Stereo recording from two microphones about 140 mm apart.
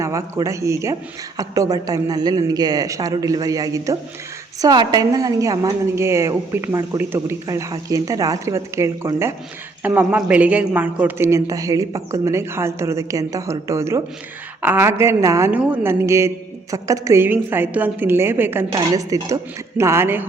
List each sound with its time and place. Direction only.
0.0 s a woman's voice: 20° right (ahead or behind)